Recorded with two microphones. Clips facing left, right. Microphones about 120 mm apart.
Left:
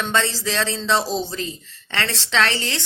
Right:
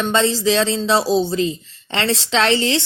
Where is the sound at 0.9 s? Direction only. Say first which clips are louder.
Right 8 dB; 5° right (ahead or behind).